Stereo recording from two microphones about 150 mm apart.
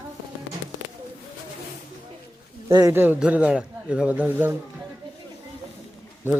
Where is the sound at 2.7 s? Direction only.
20° right (ahead or behind).